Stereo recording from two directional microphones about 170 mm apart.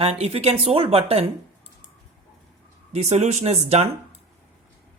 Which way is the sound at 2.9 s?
40° right (ahead or behind).